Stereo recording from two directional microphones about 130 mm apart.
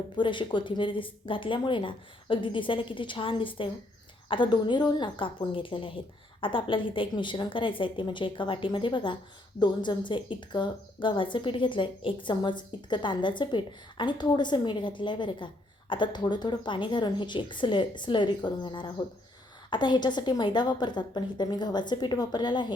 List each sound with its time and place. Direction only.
0.2 s speech: 40° left (ahead or behind)